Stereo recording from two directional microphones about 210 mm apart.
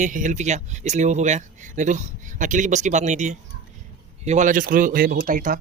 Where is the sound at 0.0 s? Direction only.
35° right (ahead or behind).